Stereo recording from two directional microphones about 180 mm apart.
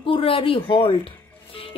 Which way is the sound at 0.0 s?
30° left (ahead or behind).